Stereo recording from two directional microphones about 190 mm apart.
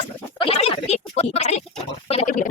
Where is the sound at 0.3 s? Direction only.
30° left (ahead or behind).